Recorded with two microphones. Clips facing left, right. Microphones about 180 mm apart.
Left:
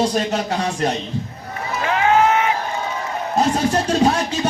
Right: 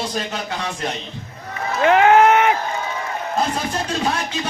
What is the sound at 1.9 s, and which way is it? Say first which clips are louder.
Run: right 3 dB; 65° right (ahead or behind).